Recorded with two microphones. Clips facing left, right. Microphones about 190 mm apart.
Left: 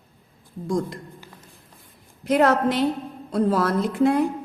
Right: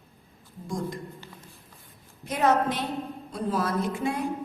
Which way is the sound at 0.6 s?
75° left (ahead or behind).